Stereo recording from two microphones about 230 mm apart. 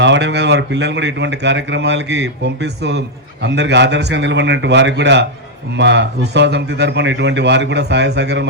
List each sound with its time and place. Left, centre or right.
0.0 s speech: right